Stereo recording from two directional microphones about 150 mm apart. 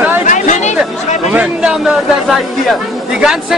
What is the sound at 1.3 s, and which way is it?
A man's voice, 5° right (ahead or behind).